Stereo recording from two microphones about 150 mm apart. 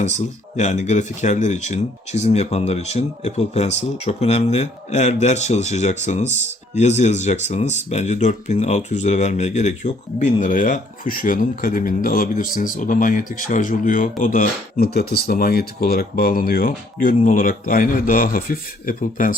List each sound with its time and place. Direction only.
0.5 s speech: 50° left (ahead or behind); by 19.3 s 65° left (ahead or behind)